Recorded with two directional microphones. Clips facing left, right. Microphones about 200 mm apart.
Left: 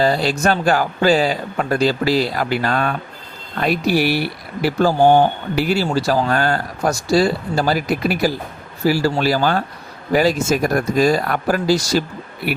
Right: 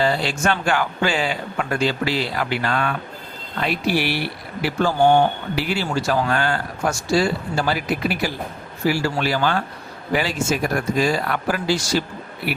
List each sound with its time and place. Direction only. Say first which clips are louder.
0.0 s speech: left 4 dB; 40° left (ahead or behind)